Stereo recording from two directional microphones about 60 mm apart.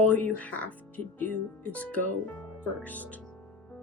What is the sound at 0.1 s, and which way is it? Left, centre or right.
Speech, left.